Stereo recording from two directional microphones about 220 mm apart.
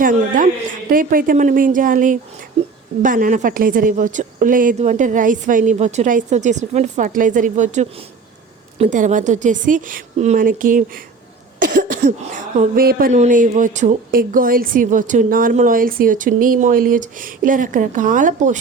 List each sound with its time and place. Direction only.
0.0 s a woman's voice: 40° right (ahead or behind)